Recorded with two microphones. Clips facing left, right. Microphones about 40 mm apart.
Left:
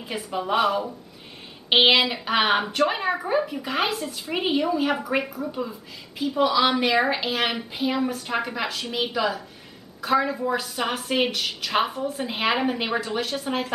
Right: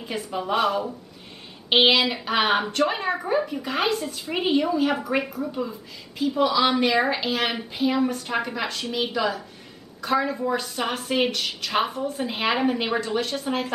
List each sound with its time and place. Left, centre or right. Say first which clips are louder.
0.0 s a woman's voice: even; centre